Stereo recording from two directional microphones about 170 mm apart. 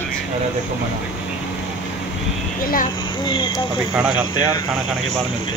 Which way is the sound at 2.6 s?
60° left (ahead or behind).